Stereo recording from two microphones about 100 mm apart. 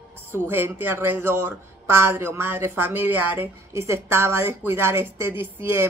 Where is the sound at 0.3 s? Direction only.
20° right (ahead or behind).